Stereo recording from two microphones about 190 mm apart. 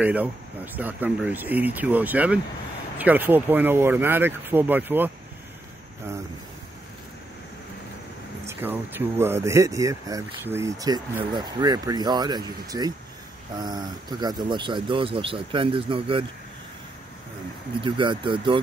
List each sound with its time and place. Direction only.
0.0 s speech: 10° right (ahead or behind)
8.5 s speech: 10° right (ahead or behind); by 16.3 s 25° right (ahead or behind)
17.8 s speech: 25° right (ahead or behind)